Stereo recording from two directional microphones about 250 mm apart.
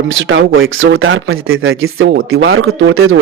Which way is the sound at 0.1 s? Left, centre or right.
Right.